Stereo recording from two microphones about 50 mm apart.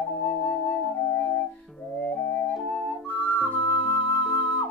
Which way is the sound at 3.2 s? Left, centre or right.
Left.